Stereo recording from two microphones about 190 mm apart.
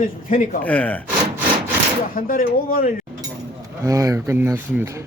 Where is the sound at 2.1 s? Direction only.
50° left (ahead or behind).